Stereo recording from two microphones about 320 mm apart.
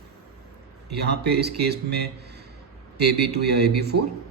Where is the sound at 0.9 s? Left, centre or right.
Right.